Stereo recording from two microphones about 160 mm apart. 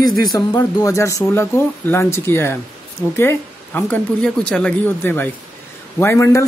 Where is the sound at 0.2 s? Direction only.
25° left (ahead or behind).